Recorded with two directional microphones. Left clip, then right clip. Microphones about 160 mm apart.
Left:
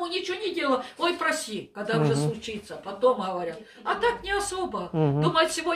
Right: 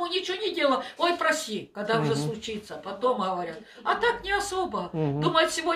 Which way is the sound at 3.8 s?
20° right (ahead or behind).